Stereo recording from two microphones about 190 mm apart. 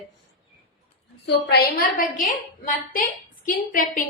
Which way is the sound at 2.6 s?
45° left (ahead or behind).